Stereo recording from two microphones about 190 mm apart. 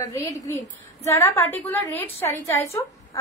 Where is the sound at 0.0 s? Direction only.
20° left (ahead or behind).